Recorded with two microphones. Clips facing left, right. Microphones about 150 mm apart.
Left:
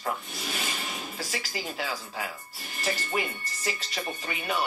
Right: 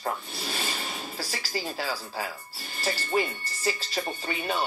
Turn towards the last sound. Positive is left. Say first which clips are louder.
# right 1 dB
turn(degrees=-30)  # may be behind; listen again after turning